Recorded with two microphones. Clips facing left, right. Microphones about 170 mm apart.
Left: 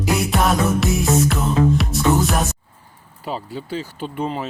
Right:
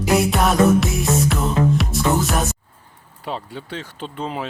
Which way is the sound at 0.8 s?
Centre (ahead or behind).